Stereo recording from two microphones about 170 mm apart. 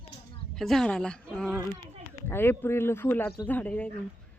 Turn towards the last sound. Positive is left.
turn(degrees=10)  # may be behind; listen again after turning